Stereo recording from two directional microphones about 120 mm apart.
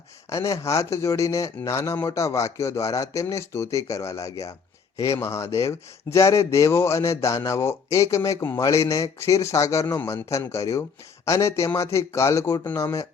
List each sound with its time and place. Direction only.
0.3 s speech: 25° left (ahead or behind)